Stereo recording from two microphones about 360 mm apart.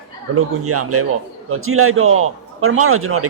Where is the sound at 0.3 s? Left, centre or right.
Right.